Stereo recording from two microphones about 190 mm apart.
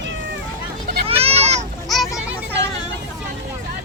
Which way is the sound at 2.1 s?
5° right (ahead or behind).